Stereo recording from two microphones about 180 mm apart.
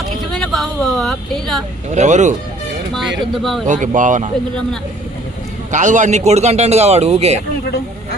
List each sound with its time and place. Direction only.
0.3 s a sound: 5° left (ahead or behind)
1.9 s a man's voice: 40° right (ahead or behind)
3.7 s speech: 45° right (ahead or behind)
5.7 s a man's voice: 45° right (ahead or behind)